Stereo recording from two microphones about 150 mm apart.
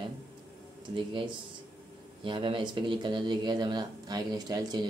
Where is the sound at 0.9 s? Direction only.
35° right (ahead or behind).